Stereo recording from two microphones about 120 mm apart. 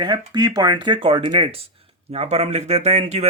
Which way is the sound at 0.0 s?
35° right (ahead or behind).